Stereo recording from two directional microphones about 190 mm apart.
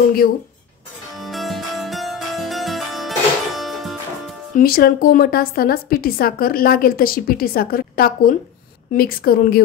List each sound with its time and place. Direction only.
1.2 s harpsichord: centre (ahead or behind)
4.6 s a woman's voice: 50° left (ahead or behind)